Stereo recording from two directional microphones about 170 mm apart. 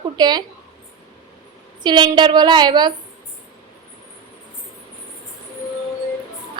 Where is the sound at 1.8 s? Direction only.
25° right (ahead or behind).